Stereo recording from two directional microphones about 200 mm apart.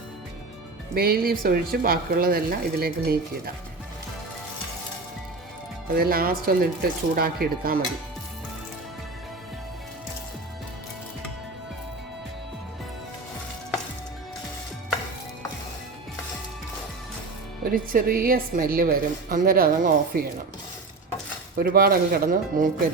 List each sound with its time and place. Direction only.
0.9 s speech: 50° right (ahead or behind)
5.9 s speech: 50° right (ahead or behind)
17.7 s speech: 45° right (ahead or behind)
21.6 s speech: 45° right (ahead or behind)